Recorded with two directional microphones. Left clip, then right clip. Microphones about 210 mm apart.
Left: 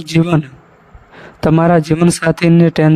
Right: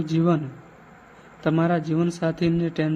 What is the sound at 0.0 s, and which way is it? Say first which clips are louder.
Speech: left 8 dB; 45° left (ahead or behind).